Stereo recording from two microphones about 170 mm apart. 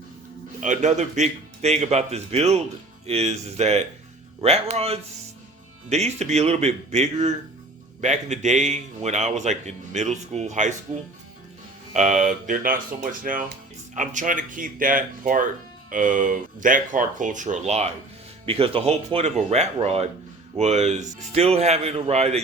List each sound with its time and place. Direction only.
0.6 s a man's voice: 45° right (ahead or behind)
11.9 s a man's voice: 45° right (ahead or behind)